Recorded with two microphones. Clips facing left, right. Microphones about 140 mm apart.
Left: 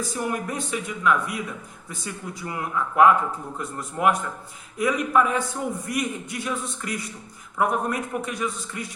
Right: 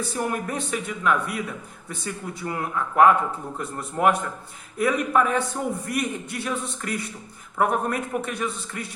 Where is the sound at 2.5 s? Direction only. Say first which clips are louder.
Even; 45° right (ahead or behind).